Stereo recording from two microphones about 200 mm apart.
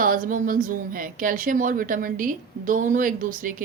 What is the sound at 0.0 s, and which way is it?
Speech, 45° right (ahead or behind).